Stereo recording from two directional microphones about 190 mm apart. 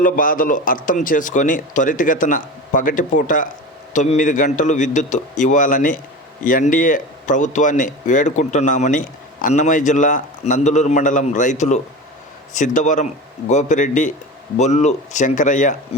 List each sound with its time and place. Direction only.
0.0 s a man's voice: 45° left (ahead or behind)